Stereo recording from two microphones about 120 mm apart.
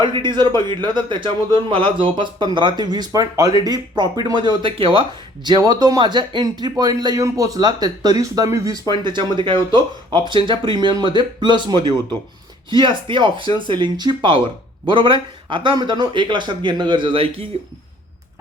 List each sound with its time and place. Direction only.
0.0 s speech: 40° right (ahead or behind)
9.0 s speech: 40° right (ahead or behind)